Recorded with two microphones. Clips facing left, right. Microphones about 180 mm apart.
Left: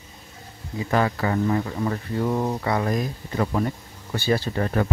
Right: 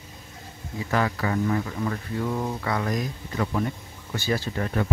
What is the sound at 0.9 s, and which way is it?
Speech, 35° left (ahead or behind).